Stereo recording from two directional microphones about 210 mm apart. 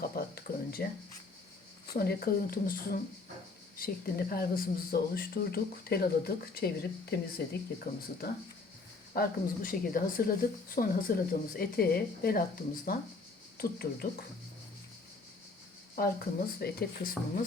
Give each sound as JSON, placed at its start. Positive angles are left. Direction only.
{"t": 0.2, "sound": "a sound", "side_deg": 45}
{"t": 1.9, "sound": "speech", "side_deg": 45}
{"t": 16.0, "sound": "speech", "side_deg": 45}